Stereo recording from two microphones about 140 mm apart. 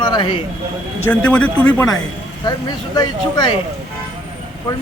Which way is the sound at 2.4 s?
30° left (ahead or behind).